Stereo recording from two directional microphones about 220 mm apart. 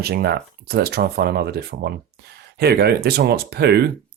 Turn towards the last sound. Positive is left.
turn(degrees=-45)  # may be behind; listen again after turning